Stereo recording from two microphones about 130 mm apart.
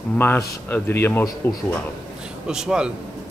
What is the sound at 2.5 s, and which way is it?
Speech, 5° right (ahead or behind).